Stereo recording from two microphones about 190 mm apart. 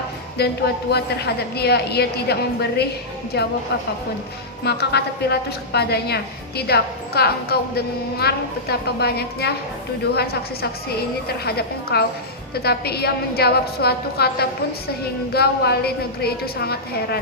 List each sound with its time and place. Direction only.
0.3 s a woman's voice: 60° left (ahead or behind)
4.6 s a woman's voice: 60° left (ahead or behind)
11.4 s a woman's voice: 55° left (ahead or behind)